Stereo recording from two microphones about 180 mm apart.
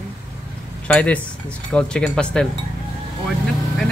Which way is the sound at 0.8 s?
5° left (ahead or behind).